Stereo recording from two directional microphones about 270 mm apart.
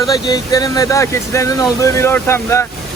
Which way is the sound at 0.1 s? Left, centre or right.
Centre.